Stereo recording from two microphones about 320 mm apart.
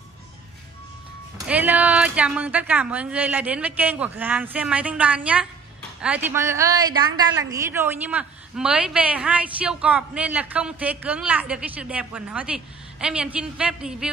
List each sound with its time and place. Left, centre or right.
1.5 s a woman's voice: centre